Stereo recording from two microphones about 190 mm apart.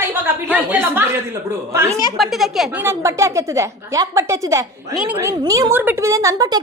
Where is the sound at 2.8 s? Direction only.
15° right (ahead or behind).